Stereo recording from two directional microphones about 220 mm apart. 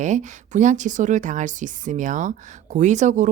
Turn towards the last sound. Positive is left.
turn(degrees=-35)  # may be behind; listen again after turning